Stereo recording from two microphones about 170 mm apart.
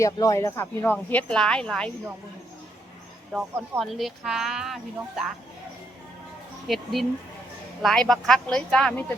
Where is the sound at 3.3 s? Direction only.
5° right (ahead or behind).